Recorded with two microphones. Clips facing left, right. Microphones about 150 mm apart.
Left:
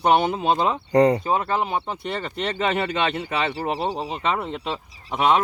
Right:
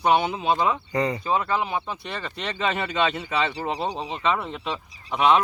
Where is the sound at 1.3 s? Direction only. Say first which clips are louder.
Left 1 dB; 45° left (ahead or behind).